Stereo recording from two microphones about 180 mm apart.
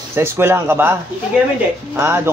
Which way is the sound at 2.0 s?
15° right (ahead or behind).